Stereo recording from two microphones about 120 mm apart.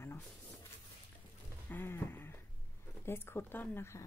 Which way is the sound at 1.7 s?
20° left (ahead or behind).